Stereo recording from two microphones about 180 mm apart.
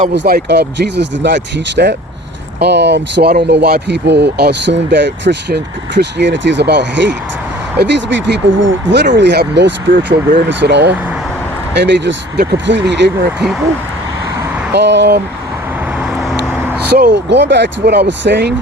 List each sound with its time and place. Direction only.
0.1 s speech: 65° right (ahead or behind)
14.7 s speech: 75° right (ahead or behind)
16.9 s speech: 70° right (ahead or behind)